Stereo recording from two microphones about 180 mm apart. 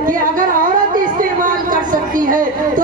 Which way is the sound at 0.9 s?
50° right (ahead or behind).